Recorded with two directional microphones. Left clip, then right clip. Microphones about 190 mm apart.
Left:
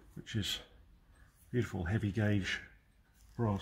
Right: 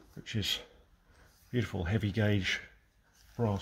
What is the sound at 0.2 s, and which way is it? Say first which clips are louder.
Speech: right 4 dB; 35° right (ahead or behind).